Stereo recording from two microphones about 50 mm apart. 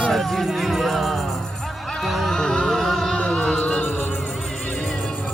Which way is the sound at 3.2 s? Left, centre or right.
Centre.